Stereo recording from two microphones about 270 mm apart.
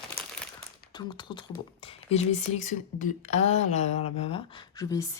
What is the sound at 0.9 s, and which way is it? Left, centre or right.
Speech, centre.